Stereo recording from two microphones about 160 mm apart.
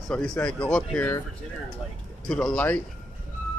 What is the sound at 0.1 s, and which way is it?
Speech, 5° left (ahead or behind).